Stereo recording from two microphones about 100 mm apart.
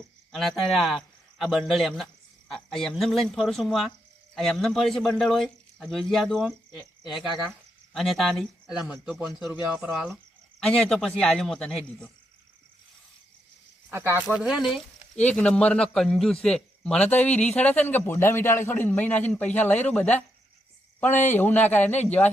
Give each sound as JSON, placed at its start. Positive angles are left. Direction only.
{"t": 0.3, "sound": "a man's voice", "side_deg": 0}
{"t": 10.6, "sound": "speech", "side_deg": 5}
{"t": 13.9, "sound": "speech", "side_deg": -20}
{"t": 14.3, "sound": "speech", "side_deg": -5}
{"t": 15.1, "sound": "a man's voice", "side_deg": 10}